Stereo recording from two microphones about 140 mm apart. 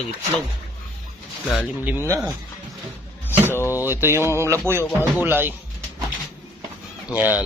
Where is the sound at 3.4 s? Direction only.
15° left (ahead or behind).